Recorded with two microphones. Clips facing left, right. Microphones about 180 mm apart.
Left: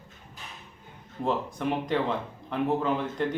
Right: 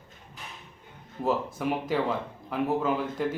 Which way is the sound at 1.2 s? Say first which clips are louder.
Right 1 dB; 5° right (ahead or behind).